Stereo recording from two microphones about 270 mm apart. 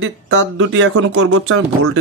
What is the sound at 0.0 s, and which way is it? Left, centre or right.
Speech, right.